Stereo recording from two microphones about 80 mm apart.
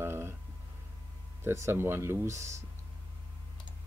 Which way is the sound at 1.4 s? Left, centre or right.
Right.